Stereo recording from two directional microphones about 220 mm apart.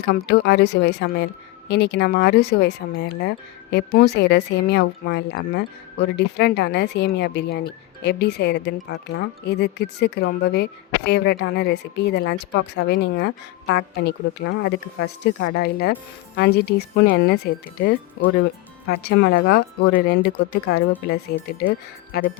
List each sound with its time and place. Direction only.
0.0 s a woman's voice: 50° left (ahead or behind)